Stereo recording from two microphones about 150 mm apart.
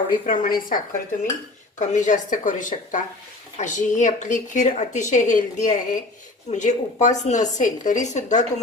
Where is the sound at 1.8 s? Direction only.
55° left (ahead or behind).